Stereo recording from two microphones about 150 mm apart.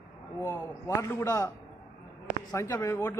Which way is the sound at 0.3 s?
20° left (ahead or behind).